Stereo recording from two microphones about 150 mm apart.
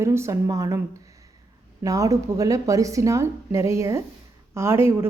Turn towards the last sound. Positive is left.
turn(degrees=-15)  # may be behind; listen again after turning